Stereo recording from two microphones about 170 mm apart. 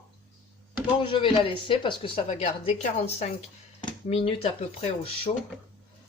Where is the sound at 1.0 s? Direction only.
30° left (ahead or behind).